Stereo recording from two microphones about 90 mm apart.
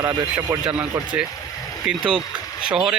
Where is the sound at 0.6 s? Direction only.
15° right (ahead or behind).